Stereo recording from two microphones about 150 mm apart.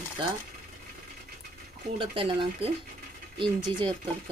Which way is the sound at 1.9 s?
35° right (ahead or behind).